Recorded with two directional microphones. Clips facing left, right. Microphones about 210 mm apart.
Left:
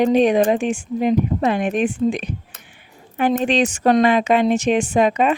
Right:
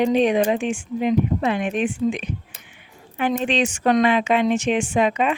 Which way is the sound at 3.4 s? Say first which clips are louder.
Left 3 dB; 40° left (ahead or behind).